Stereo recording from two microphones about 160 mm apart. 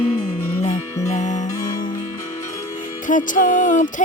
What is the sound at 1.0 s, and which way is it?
Music, 50° left (ahead or behind).